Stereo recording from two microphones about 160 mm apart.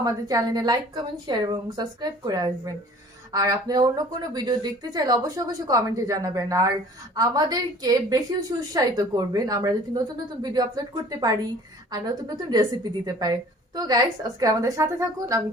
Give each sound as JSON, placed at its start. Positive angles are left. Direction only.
{"t": 0.0, "sound": "a woman's voice", "side_deg": -25}